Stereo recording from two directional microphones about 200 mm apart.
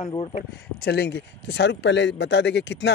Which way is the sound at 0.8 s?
55° left (ahead or behind).